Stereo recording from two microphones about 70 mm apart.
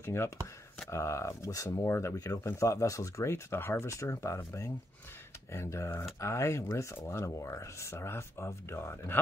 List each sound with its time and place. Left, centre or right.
0.0 s speech: left